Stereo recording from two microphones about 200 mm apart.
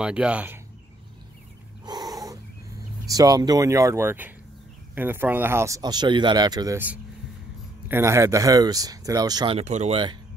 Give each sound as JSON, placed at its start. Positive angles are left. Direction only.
{"t": 0.0, "sound": "speech", "side_deg": -5}
{"t": 1.9, "sound": "cat", "side_deg": -20}
{"t": 3.1, "sound": "speech", "side_deg": -20}